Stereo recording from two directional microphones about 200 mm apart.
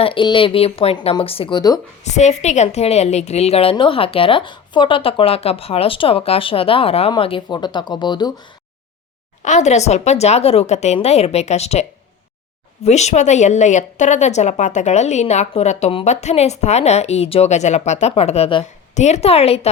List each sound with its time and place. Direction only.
0.0 s a woman's voice: 25° left (ahead or behind)
2.0 s a woman's voice: 35° left (ahead or behind)
9.4 s a woman's voice: 35° left (ahead or behind)